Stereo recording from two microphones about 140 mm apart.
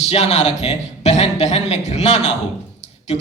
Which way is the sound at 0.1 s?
50° left (ahead or behind).